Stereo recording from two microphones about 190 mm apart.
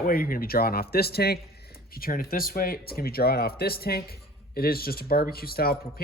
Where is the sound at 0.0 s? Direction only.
50° left (ahead or behind).